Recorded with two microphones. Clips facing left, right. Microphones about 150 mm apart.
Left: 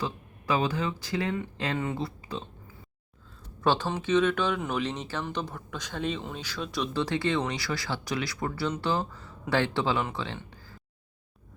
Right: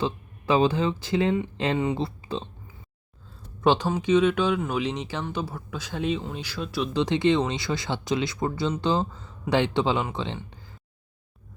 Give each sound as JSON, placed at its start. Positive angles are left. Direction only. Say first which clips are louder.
{"t": 0.0, "sound": "speech", "louder": "right 5 dB", "side_deg": -25}
{"t": 3.6, "sound": "speech", "louder": "right 4 dB", "side_deg": -15}
{"t": 6.9, "sound": "speech", "louder": "right 7 dB", "side_deg": -20}